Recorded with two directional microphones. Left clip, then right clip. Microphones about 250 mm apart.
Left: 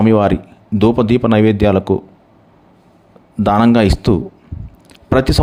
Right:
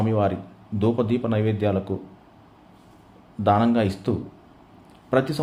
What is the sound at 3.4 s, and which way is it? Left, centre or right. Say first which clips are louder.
Speech: left 8 dB; left.